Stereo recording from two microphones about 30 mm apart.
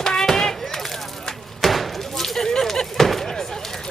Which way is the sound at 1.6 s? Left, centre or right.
Centre.